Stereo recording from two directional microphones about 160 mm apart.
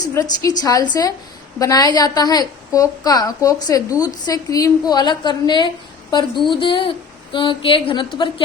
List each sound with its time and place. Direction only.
0.0 s a woman's voice: 20° left (ahead or behind)